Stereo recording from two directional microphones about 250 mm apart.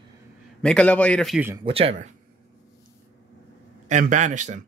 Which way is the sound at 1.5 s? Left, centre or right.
Centre.